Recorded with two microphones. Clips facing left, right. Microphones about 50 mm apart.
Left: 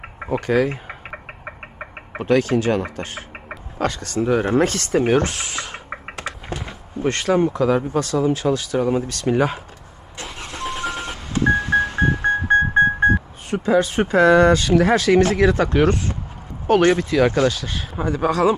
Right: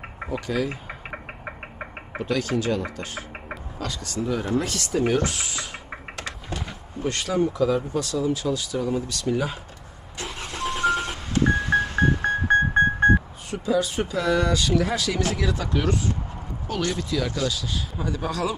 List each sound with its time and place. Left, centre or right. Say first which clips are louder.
0.3 s a man's voice: left 8 dB; left
1.1 s knock: left 1 dB; centre
2.1 s a man's voice: left 7 dB; left
5.9 s typing: left 4 dB; left
7.0 s a man's voice: left 6 dB; left
10.2 s vehicle: left 1 dB; centre
11.5 s music: left 3 dB; centre
13.5 s a man's voice: left 6 dB; left